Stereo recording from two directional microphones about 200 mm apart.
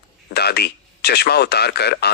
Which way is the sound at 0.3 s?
55° left (ahead or behind).